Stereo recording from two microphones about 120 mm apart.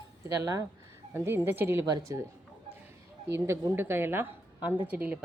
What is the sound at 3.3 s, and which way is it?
Speech, 25° right (ahead or behind).